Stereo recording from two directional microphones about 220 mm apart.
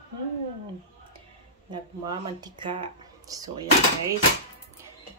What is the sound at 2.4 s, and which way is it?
Speech, 20° right (ahead or behind).